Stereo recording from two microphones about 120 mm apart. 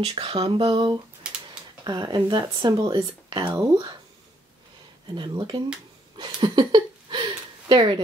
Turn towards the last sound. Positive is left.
turn(degrees=-40)  # may be behind; listen again after turning